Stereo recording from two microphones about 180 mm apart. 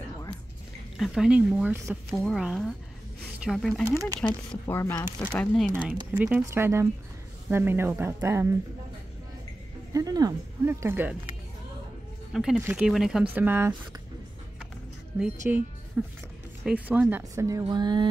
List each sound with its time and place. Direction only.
0.9 s speech: centre (ahead or behind)
5.7 s speech: 10° right (ahead or behind)
9.9 s speech: 20° right (ahead or behind)
12.3 s speech: centre (ahead or behind)
15.1 s speech: 5° right (ahead or behind); by 18.0 s 25° right (ahead or behind)